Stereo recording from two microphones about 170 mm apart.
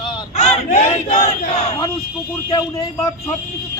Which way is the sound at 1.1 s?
35° left (ahead or behind).